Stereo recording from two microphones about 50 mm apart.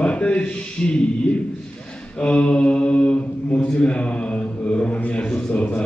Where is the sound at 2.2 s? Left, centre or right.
Left.